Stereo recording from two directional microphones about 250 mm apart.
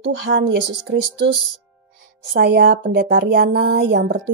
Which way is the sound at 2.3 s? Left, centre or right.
Right.